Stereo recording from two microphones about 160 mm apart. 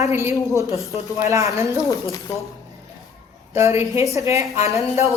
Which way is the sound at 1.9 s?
20° left (ahead or behind).